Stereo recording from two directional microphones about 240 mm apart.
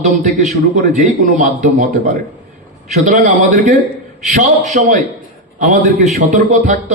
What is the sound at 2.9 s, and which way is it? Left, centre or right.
A man's voice, right.